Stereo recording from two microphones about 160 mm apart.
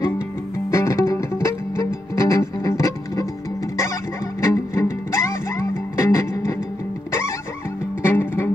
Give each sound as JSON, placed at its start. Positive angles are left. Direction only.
{"t": 0.7, "sound": "music", "side_deg": 20}
{"t": 4.4, "sound": "music", "side_deg": 15}